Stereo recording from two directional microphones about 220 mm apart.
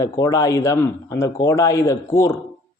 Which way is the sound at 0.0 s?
15° left (ahead or behind).